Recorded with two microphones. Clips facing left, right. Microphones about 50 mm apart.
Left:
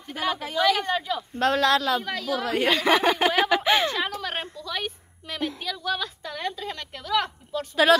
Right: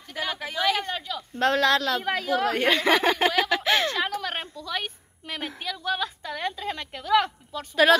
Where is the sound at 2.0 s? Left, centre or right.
Right.